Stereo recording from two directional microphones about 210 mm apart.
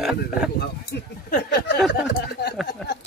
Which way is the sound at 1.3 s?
50° left (ahead or behind).